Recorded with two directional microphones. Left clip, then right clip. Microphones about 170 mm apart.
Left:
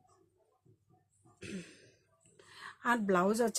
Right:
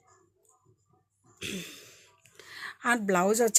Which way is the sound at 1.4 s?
40° right (ahead or behind).